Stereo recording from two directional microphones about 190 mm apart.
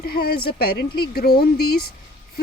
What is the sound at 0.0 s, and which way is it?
Speech, 55° left (ahead or behind).